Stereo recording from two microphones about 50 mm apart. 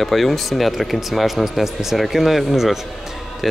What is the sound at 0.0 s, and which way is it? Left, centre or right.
Speech, centre.